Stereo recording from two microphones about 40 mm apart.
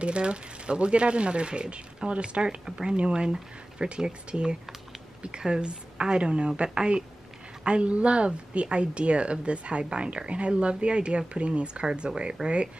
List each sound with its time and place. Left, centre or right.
0.0 s speech: right